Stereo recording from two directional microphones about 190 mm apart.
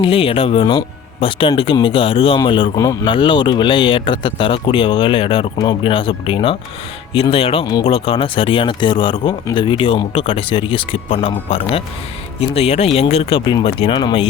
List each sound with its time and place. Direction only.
0.0 s speech: 30° left (ahead or behind)